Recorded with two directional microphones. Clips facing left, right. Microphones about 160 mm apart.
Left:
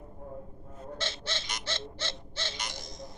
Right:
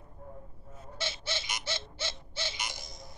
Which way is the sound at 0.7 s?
10° right (ahead or behind).